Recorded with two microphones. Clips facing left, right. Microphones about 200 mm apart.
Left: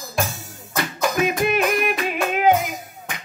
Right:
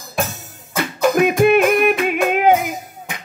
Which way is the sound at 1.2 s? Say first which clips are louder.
Right 7 dB; 55° right (ahead or behind).